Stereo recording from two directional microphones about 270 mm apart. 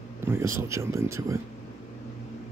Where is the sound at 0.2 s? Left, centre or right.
Centre.